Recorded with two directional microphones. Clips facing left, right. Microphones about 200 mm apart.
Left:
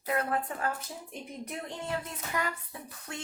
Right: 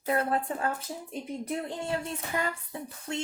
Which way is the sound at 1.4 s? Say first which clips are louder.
Right 4 dB; 30° right (ahead or behind).